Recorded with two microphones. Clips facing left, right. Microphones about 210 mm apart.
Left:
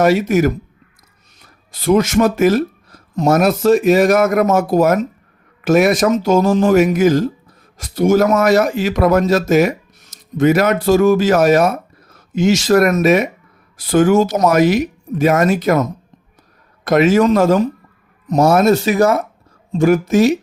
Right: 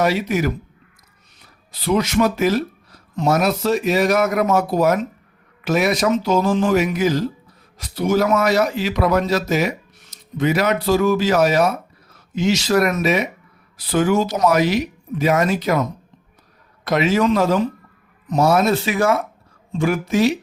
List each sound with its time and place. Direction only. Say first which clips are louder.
0.0 s a man's voice: left 6 dB; 45° left (ahead or behind)
1.7 s a man's voice: left 5 dB; 45° left (ahead or behind)